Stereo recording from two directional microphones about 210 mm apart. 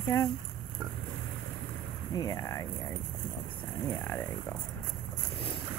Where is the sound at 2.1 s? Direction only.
15° left (ahead or behind).